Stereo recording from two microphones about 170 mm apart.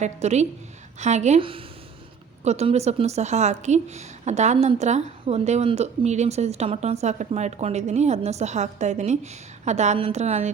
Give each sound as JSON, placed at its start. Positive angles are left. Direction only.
{"t": 0.0, "sound": "speech", "side_deg": -40}